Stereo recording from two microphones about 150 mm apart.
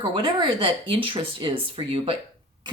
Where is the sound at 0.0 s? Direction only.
35° right (ahead or behind).